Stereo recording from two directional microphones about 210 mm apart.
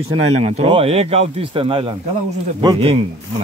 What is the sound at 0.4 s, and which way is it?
A man's voice, 30° right (ahead or behind).